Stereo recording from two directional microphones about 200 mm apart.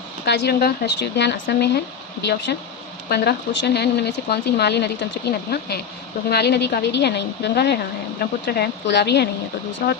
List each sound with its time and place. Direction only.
0.3 s speech: 55° left (ahead or behind)